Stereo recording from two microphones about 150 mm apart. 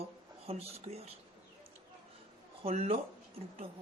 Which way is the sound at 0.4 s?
45° right (ahead or behind).